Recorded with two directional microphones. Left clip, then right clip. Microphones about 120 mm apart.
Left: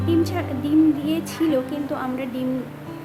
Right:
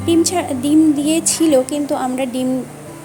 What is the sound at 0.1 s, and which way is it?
A woman's voice, 45° right (ahead or behind).